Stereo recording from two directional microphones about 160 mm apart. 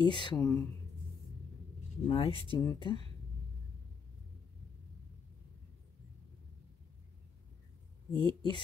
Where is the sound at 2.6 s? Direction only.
25° left (ahead or behind).